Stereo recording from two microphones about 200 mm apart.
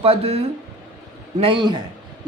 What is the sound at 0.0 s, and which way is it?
Speech, 30° right (ahead or behind).